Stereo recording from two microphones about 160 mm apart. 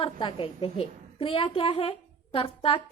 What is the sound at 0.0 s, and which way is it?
A child's voice, 35° left (ahead or behind).